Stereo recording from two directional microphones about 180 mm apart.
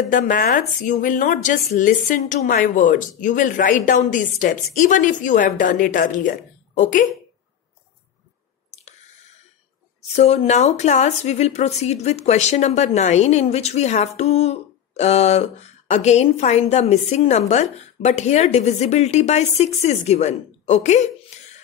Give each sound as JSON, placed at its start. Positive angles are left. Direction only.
{"t": 0.1, "sound": "speech", "side_deg": 45}
{"t": 8.6, "sound": "chewing", "side_deg": 40}
{"t": 10.1, "sound": "a woman's voice", "side_deg": 35}